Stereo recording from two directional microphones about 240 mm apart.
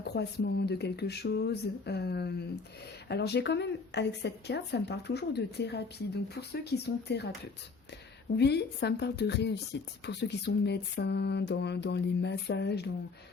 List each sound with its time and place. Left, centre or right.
0.0 s speech: left
8.4 s speech: left